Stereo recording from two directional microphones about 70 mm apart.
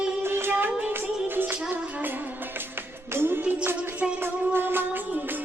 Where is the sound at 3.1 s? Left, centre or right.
Right.